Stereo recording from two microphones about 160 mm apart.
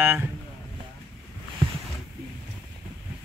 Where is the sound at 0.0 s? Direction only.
15° right (ahead or behind).